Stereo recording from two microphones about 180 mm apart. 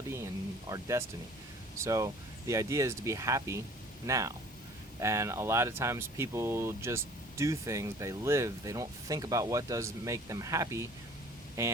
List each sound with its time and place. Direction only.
0.7 s speech: 15° right (ahead or behind)